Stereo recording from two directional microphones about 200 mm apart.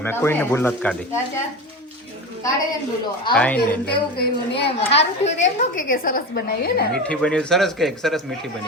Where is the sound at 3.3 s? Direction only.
5° left (ahead or behind).